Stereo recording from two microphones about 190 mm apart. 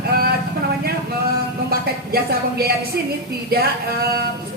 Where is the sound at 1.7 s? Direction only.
55° right (ahead or behind).